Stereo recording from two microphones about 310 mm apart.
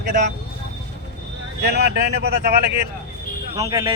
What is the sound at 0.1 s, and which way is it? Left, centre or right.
Speech, right.